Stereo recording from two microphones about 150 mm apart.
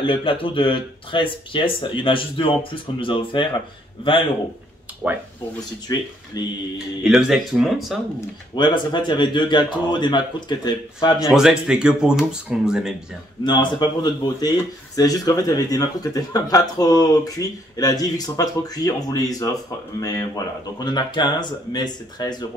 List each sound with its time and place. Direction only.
0.0 s speech: 35° left (ahead or behind)
5.0 s speech: 10° right (ahead or behind)
5.9 s speech: 25° left (ahead or behind)
7.0 s speech: 5° right (ahead or behind)
8.5 s speech: 30° left (ahead or behind)
11.3 s speech: 5° right (ahead or behind)
13.4 s speech: 30° left (ahead or behind)